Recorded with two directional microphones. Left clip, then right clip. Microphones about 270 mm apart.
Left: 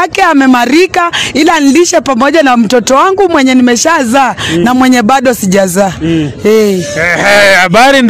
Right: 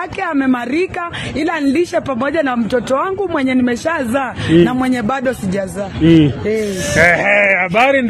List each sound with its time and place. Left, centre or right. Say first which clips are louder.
0.2 s a woman's voice: left 10 dB; left
7.2 s a man's voice: left 8 dB; left